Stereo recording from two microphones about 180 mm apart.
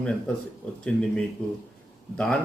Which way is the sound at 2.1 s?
5° left (ahead or behind).